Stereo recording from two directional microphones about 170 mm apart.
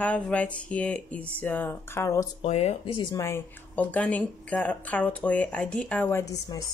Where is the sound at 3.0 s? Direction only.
20° left (ahead or behind).